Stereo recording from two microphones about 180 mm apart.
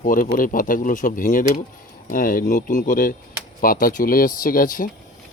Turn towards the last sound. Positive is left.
turn(degrees=50)  # may be behind; listen again after turning